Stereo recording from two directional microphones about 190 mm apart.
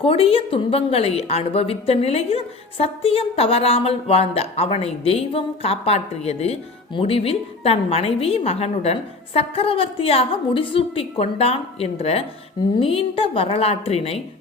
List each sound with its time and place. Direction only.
0.0 s a woman's voice: 30° left (ahead or behind)